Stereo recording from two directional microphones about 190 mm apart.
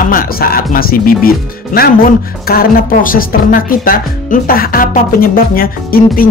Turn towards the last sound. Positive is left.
turn(degrees=50)  # may be behind; listen again after turning